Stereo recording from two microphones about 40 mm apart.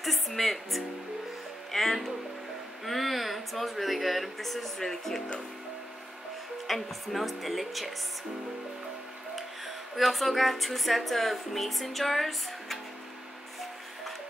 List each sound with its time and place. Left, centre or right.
0.0 s speech: centre
6.7 s speech: centre
9.9 s speech: centre